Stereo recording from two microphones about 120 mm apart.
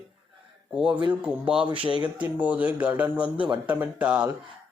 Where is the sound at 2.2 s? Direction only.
10° right (ahead or behind).